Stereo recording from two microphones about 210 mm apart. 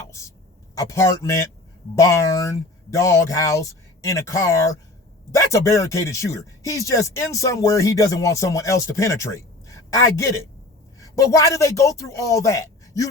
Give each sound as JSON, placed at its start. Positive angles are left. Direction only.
{"t": 0.8, "sound": "a man's voice", "side_deg": 15}